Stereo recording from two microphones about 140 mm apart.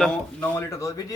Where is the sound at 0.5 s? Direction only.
20° left (ahead or behind).